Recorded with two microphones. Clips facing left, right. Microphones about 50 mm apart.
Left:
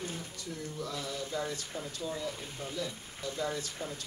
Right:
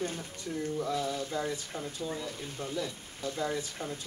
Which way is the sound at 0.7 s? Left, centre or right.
Right.